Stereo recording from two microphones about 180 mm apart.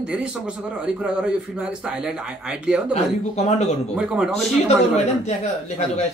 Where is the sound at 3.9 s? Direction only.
5° right (ahead or behind).